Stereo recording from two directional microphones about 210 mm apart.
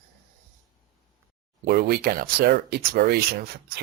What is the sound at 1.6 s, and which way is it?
Speech, 50° right (ahead or behind).